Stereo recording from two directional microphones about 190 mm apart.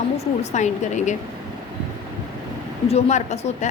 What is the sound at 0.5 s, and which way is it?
Speech, 40° left (ahead or behind).